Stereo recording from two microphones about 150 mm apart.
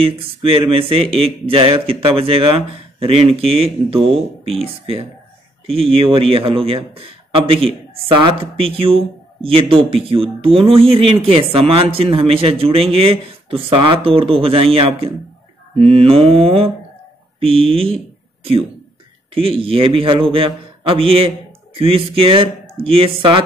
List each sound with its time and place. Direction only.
0.0 s speech: 40° right (ahead or behind)